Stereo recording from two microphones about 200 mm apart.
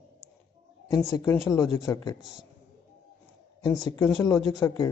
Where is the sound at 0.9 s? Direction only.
15° left (ahead or behind).